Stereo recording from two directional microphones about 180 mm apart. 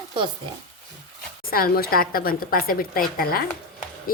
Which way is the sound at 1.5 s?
55° left (ahead or behind).